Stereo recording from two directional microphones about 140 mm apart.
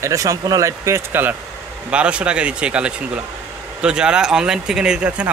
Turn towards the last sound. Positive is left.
turn(degrees=-10)  # may be behind; listen again after turning